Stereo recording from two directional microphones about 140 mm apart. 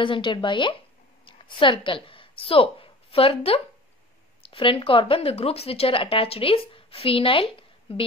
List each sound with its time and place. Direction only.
0.0 s a woman's voice: 35° left (ahead or behind)